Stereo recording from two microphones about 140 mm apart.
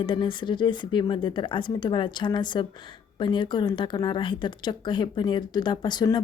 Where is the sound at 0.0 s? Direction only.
35° left (ahead or behind).